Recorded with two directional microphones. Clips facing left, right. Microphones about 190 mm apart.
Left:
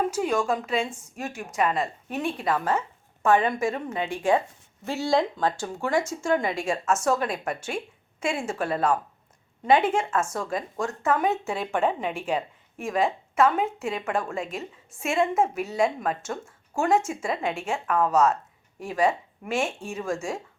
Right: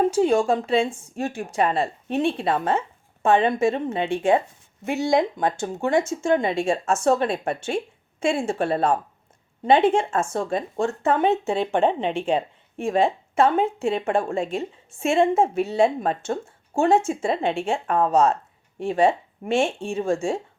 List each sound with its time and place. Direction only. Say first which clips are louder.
0.0 s speech: right 6 dB; 30° right (ahead or behind)